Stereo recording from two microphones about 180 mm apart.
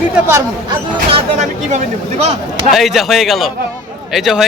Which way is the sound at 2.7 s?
Centre (ahead or behind).